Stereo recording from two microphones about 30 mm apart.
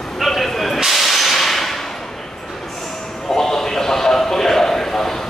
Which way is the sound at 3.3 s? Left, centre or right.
Centre.